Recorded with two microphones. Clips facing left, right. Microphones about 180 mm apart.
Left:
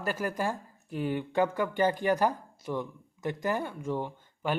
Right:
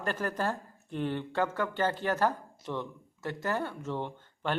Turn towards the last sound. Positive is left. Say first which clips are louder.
# left 1 dB
turn(degrees=10)  # may be behind; listen again after turning